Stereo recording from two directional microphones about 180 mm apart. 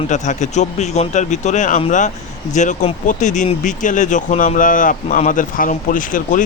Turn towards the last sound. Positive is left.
turn(degrees=45)  # may be behind; listen again after turning